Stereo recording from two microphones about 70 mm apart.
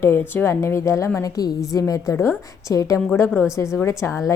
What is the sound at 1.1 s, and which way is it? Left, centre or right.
A woman's voice, left.